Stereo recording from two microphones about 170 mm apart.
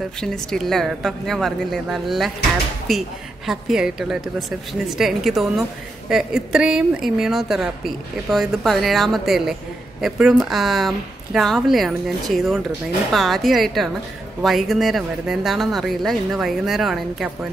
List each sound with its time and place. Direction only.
0.2 s a woman's voice: 5° left (ahead or behind)